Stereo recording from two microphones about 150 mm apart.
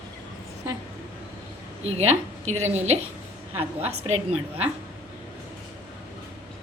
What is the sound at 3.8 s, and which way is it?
Speech, 45° right (ahead or behind).